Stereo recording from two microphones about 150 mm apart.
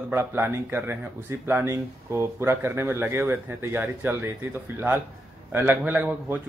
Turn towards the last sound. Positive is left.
turn(degrees=-10)  # may be behind; listen again after turning